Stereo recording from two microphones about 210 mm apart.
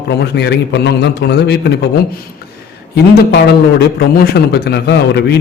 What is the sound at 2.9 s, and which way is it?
A man's voice, 50° left (ahead or behind).